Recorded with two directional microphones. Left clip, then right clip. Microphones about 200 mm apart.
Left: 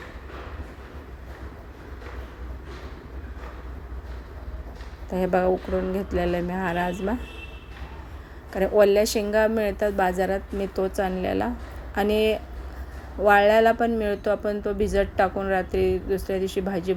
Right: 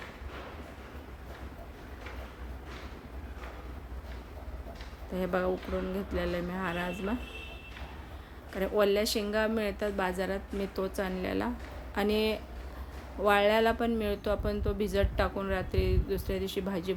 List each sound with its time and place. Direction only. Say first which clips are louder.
5.1 s speech: left 9 dB; 15° left (ahead or behind)
8.5 s speech: left 9 dB; 15° left (ahead or behind)